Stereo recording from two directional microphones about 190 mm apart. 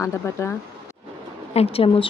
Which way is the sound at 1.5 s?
30° left (ahead or behind).